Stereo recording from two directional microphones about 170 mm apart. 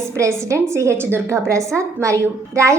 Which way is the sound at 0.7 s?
15° right (ahead or behind).